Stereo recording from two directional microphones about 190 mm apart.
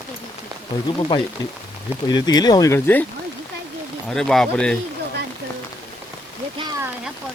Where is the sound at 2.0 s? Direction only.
20° left (ahead or behind).